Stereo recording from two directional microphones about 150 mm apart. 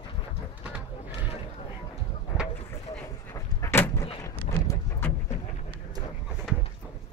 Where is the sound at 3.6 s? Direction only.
15° left (ahead or behind).